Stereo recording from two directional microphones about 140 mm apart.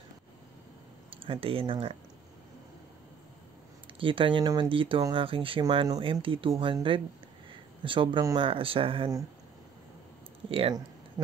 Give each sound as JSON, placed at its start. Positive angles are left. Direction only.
{"t": 1.1, "sound": "speech", "side_deg": -40}
{"t": 4.0, "sound": "speech", "side_deg": -40}